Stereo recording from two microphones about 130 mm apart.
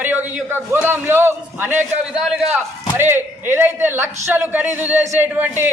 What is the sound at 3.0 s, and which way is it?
A man's voice, 15° right (ahead or behind).